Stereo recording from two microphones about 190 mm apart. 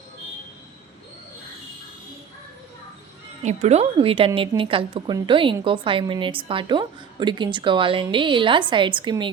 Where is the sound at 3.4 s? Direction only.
35° right (ahead or behind).